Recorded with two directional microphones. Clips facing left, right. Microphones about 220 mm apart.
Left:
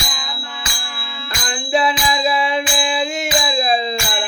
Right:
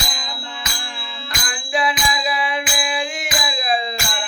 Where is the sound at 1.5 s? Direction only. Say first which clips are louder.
Left 4 dB; 25° left (ahead or behind).